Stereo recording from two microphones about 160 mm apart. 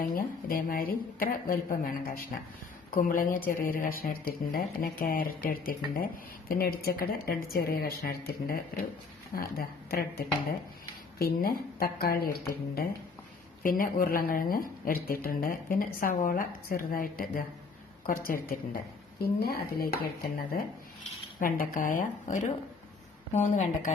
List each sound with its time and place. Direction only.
0.0 s a woman's voice: 65° left (ahead or behind)
13.6 s a woman's voice: 60° left (ahead or behind)
19.2 s a woman's voice: 75° left (ahead or behind); by 23.9 s 45° left (ahead or behind)